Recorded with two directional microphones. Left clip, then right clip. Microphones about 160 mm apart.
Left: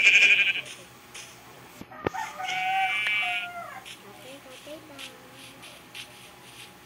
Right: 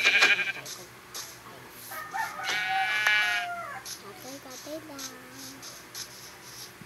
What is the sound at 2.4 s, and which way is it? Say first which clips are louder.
Goat: left 3 dB; 50° right (ahead or behind).